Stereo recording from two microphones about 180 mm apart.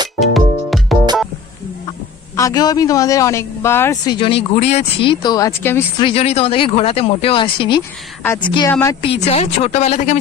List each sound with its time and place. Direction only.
0.2 s music: centre (ahead or behind)
2.3 s a man's voice: 20° left (ahead or behind)
5.9 s a man's voice: 30° left (ahead or behind)